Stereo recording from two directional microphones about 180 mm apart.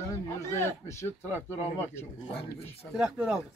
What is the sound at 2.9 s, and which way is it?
Speech, 5° right (ahead or behind).